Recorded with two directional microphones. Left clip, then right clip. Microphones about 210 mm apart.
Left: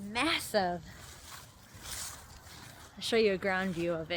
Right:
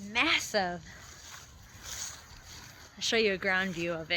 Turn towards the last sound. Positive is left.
turn(degrees=0)  # may be behind; listen again after turning